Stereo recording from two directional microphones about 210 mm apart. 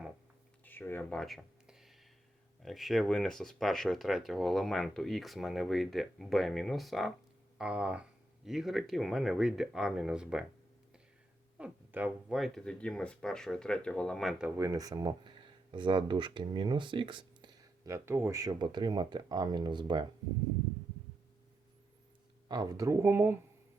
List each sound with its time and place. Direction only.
0.6 s a sound: 10° left (ahead or behind)
2.6 s speech: centre (ahead or behind)
11.5 s speech: 5° right (ahead or behind)
14.6 s speech: 15° right (ahead or behind)
22.4 s speech: 20° right (ahead or behind)